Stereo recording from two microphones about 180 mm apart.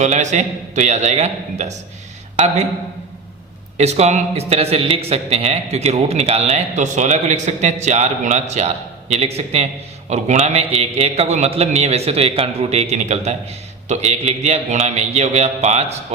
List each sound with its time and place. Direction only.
0.0 s speech: 40° right (ahead or behind)
3.8 s speech: 35° right (ahead or behind)